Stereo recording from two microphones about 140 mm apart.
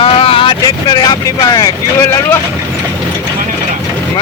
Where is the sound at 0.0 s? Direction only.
40° left (ahead or behind).